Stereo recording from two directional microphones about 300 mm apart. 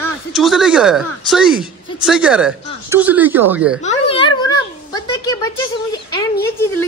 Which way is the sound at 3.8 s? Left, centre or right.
Centre.